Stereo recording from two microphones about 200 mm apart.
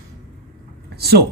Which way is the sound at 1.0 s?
50° right (ahead or behind).